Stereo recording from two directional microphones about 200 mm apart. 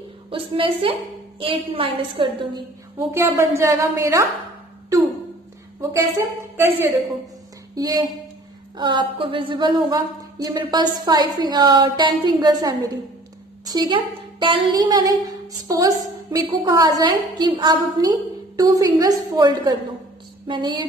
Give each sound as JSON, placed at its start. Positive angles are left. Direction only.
{"t": 0.3, "sound": "a woman's voice", "side_deg": -25}
{"t": 6.5, "sound": "a woman's voice", "side_deg": -10}